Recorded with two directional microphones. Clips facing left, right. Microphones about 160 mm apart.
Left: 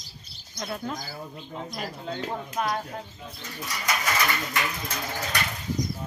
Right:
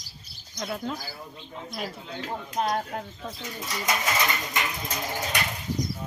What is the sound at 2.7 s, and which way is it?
Speech, 65° right (ahead or behind).